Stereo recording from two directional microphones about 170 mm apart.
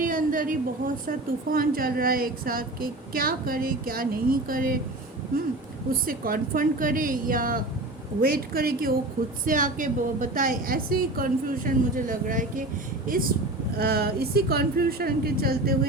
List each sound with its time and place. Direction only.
0.0 s a woman's voice: 50° right (ahead or behind)
6.1 s a woman's voice: 55° right (ahead or behind)
13.7 s a woman's voice: 65° right (ahead or behind)